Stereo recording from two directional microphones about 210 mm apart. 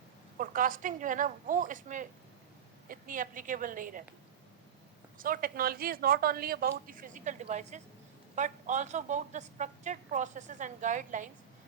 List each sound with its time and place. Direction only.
0.3 s a woman's voice: 40° right (ahead or behind)
5.1 s a woman's voice: 40° right (ahead or behind)